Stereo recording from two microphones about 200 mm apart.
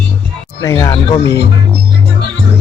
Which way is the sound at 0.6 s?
20° left (ahead or behind).